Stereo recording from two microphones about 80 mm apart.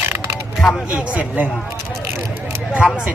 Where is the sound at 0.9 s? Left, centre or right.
Centre.